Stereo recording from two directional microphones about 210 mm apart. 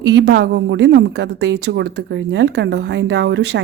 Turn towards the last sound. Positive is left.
turn(degrees=-55)  # may be behind; listen again after turning